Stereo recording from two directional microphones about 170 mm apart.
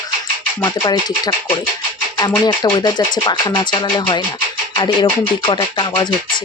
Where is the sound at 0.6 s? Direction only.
20° left (ahead or behind).